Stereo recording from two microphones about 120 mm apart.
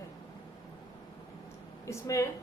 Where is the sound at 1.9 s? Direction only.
25° left (ahead or behind).